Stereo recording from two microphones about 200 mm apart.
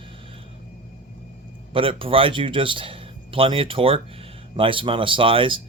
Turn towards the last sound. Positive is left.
turn(degrees=-25)  # may be behind; listen again after turning